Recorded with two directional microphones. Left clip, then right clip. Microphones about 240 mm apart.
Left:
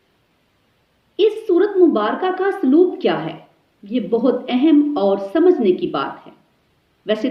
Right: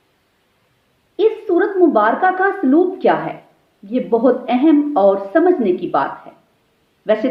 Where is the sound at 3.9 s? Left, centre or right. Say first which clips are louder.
Right 3 dB; right.